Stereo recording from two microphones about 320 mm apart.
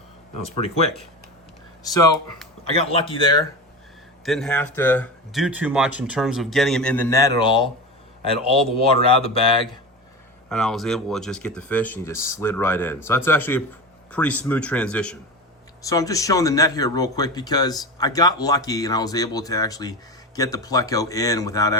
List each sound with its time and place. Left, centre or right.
0.5 s speech: centre
2.7 s speech: centre
4.3 s speech: centre
10.5 s speech: centre